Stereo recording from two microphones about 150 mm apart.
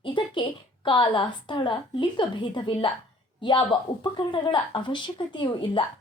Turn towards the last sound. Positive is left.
turn(degrees=35)  # may be behind; listen again after turning